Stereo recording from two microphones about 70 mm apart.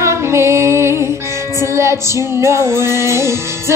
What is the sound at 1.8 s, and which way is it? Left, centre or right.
Female singing, right.